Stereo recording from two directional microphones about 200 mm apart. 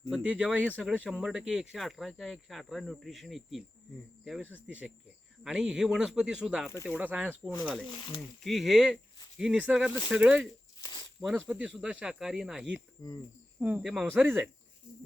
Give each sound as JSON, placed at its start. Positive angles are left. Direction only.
{"t": 0.1, "sound": "speech", "side_deg": -5}
{"t": 0.7, "sound": "speech", "side_deg": 5}
{"t": 0.9, "sound": "speech", "side_deg": -5}
{"t": 7.9, "sound": "speech", "side_deg": 25}
{"t": 8.4, "sound": "speech", "side_deg": 0}